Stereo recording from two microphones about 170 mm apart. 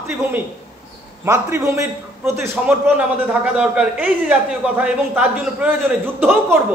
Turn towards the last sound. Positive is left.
turn(degrees=-10)  # may be behind; listen again after turning